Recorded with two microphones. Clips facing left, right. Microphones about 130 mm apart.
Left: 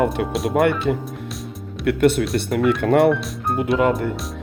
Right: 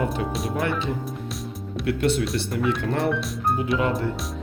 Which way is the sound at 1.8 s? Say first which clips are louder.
Left 6 dB; 60° left (ahead or behind).